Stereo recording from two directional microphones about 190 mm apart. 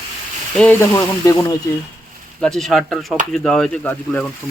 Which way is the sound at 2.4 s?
Centre (ahead or behind).